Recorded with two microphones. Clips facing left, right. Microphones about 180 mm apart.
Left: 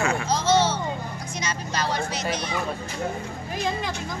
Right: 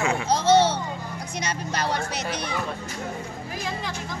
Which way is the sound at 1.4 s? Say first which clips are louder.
Even; 60° right (ahead or behind).